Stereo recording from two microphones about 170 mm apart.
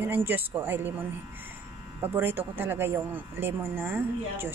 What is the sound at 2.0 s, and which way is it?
A woman's voice, 10° right (ahead or behind).